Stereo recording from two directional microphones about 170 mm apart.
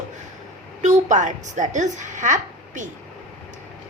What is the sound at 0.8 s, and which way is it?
A woman's voice, 45° right (ahead or behind).